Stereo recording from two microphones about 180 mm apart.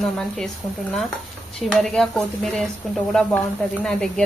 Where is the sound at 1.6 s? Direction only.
Centre (ahead or behind).